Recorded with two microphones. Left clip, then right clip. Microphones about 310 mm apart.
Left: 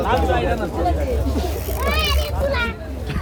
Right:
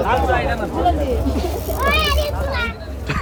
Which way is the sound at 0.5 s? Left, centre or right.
Right.